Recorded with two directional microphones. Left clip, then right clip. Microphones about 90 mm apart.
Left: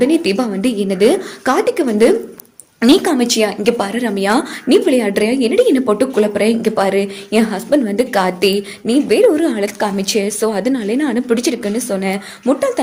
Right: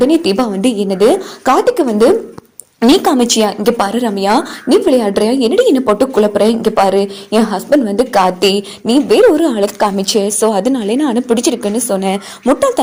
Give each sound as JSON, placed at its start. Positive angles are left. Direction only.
{"t": 0.0, "sound": "a woman's voice", "side_deg": -40}
{"t": 0.8, "sound": "a woman's voice", "side_deg": -25}
{"t": 3.1, "sound": "a woman's voice", "side_deg": -55}
{"t": 4.0, "sound": "a woman's voice", "side_deg": -25}
{"t": 5.2, "sound": "a woman's voice", "side_deg": -50}
{"t": 8.4, "sound": "a woman's voice", "side_deg": -50}
{"t": 12.1, "sound": "a woman's voice", "side_deg": -90}